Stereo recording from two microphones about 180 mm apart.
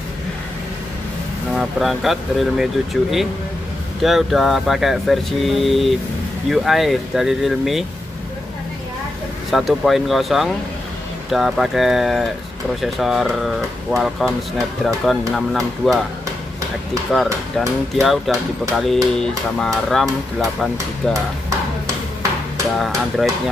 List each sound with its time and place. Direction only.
1.5 s speech: centre (ahead or behind)
9.5 s speech: centre (ahead or behind)
17.1 s speech: centre (ahead or behind)
20.7 s speech: 20° right (ahead or behind)
22.8 s speech: centre (ahead or behind)